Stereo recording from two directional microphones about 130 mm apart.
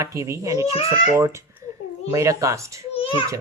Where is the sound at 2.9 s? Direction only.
45° left (ahead or behind).